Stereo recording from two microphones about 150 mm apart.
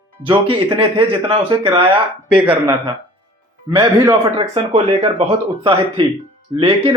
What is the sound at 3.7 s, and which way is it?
Speech, 30° right (ahead or behind).